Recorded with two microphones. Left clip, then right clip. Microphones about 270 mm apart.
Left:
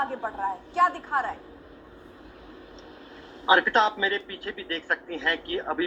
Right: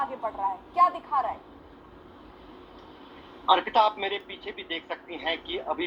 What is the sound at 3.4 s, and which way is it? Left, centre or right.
Speech, left.